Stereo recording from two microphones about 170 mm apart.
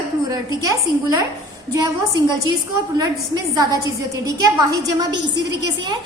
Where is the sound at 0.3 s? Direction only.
20° right (ahead or behind).